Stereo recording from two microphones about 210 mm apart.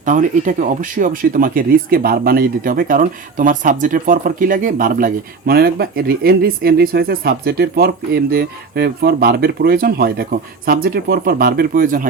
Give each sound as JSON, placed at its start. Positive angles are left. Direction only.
{"t": 0.0, "sound": "speech", "side_deg": -35}